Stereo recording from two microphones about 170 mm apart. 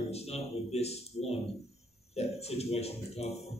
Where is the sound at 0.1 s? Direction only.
40° left (ahead or behind).